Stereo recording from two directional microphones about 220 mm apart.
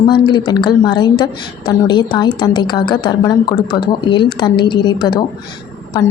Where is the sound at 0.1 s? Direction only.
20° left (ahead or behind).